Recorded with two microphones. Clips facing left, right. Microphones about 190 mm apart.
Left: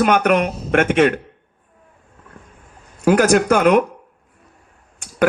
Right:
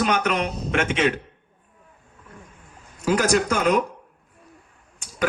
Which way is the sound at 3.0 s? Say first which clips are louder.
Left 7 dB; 55° left (ahead or behind).